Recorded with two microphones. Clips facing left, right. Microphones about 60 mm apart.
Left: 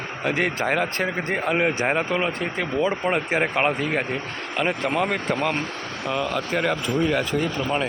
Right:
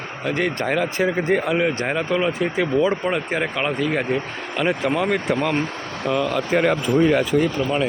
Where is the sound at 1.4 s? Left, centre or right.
Left.